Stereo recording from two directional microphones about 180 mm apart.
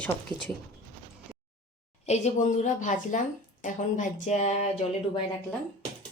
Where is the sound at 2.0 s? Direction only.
40° left (ahead or behind).